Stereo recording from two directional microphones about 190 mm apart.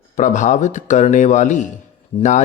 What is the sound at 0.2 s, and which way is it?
A man's voice, 40° left (ahead or behind).